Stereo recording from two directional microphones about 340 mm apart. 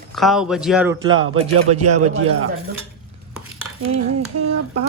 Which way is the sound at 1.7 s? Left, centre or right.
Right.